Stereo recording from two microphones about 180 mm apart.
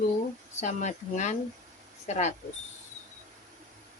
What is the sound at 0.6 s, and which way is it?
A woman's voice, 40° left (ahead or behind).